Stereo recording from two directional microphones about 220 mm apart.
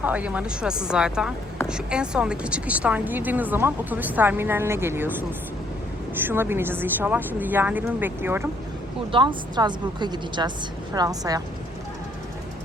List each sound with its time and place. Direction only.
0.0 s speech: 5° right (ahead or behind)
6.1 s speech: 10° right (ahead or behind)
9.1 s a woman's voice: 20° right (ahead or behind)